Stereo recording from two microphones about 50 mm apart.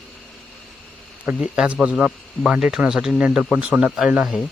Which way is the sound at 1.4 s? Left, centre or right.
Centre.